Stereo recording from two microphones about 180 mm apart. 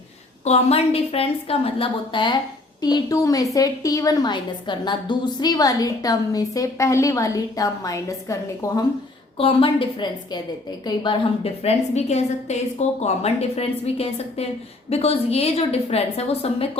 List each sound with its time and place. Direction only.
0.4 s a woman's voice: 35° left (ahead or behind); by 8.8 s 15° left (ahead or behind)
9.4 s a woman's voice: 30° left (ahead or behind)